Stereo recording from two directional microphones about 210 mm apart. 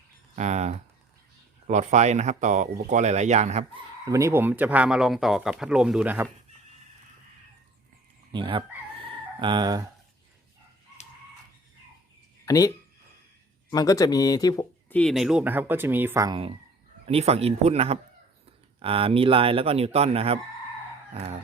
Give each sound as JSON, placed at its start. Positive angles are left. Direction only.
{"t": 0.3, "sound": "speech", "side_deg": -35}
{"t": 4.0, "sound": "speech", "side_deg": -15}
{"t": 8.3, "sound": "a man's voice", "side_deg": -25}
{"t": 12.5, "sound": "speech", "side_deg": 15}
{"t": 17.1, "sound": "a man's voice", "side_deg": -30}
{"t": 21.1, "sound": "crowing", "side_deg": -30}